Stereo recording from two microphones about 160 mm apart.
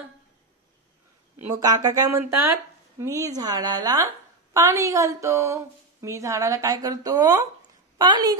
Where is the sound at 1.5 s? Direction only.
20° right (ahead or behind).